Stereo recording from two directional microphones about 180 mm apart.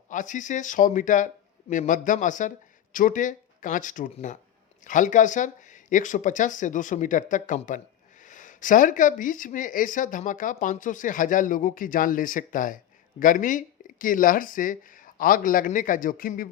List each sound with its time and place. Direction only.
0.1 s speech: 45° left (ahead or behind)